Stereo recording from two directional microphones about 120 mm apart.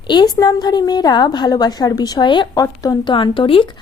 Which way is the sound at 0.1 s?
35° left (ahead or behind).